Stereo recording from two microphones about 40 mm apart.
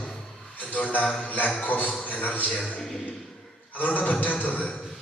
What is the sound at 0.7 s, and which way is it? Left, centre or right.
A man's voice, left.